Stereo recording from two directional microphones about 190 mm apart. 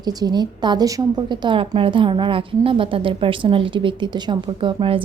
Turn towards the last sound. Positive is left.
turn(degrees=-30)  # may be behind; listen again after turning